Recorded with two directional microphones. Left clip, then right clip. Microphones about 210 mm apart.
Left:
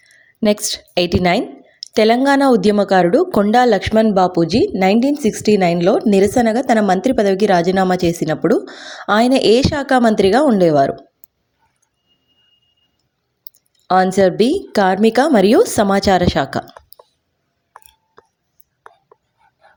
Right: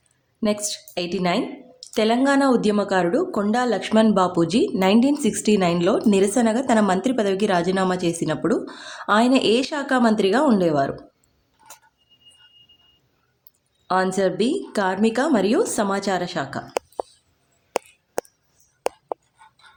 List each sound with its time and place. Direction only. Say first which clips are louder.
0.3 s speech: left 7 dB; 35° left (ahead or behind)
13.4 s speech: left 10 dB; 30° left (ahead or behind)